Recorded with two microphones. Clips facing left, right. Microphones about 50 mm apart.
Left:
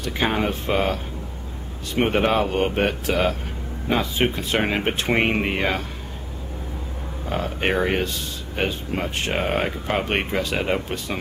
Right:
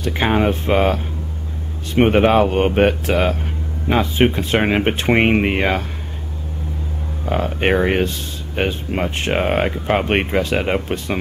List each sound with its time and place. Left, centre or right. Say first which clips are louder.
0.0 s speech: right 5 dB; right
7.2 s speech: right 5 dB; right